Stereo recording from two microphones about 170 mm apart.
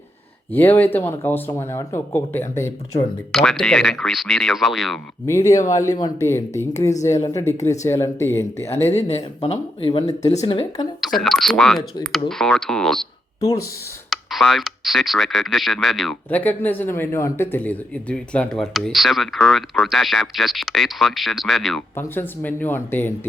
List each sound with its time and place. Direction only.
0.5 s speech: 10° left (ahead or behind)
3.3 s speech: 5° left (ahead or behind)
5.2 s speech: 15° left (ahead or behind)
9.0 s speech: 40° left (ahead or behind)
11.0 s speech: centre (ahead or behind)
13.4 s speech: 20° left (ahead or behind)
14.1 s speech: centre (ahead or behind)
21.9 s speech: 10° left (ahead or behind)